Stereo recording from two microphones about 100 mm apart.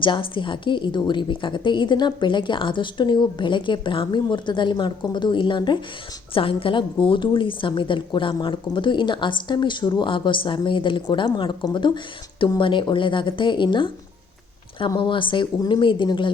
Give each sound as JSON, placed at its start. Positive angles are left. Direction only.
{"t": 0.0, "sound": "a woman's voice", "side_deg": 55}
{"t": 6.3, "sound": "a woman's voice", "side_deg": 65}